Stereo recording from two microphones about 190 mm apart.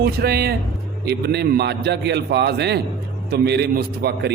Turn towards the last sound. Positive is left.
turn(degrees=-60)  # may be behind; listen again after turning